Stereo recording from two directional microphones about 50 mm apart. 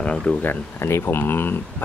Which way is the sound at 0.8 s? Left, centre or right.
Left.